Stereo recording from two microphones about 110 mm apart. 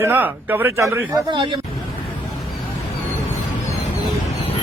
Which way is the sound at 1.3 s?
50° right (ahead or behind).